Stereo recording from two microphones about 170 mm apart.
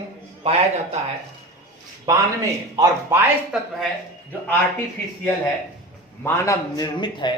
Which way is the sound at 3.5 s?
5° right (ahead or behind).